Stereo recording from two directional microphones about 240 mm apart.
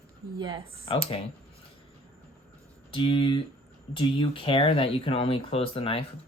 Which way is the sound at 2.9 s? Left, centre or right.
Left.